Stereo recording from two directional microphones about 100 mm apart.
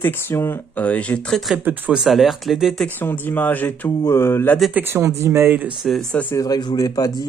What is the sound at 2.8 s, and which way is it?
Speech, 20° left (ahead or behind).